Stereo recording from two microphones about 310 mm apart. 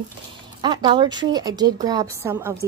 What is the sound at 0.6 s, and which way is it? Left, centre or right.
A woman's voice, centre.